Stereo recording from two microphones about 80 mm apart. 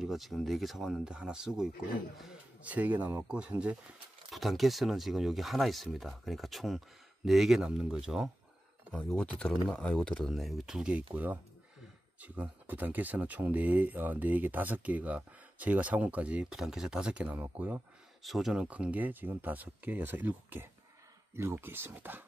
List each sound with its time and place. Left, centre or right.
0.0 s speech: centre
2.6 s speech: right
4.3 s speech: centre
8.9 s speech: centre
10.3 s speech: centre
17.4 s speech: right
18.2 s speech: centre; by 22.2 s right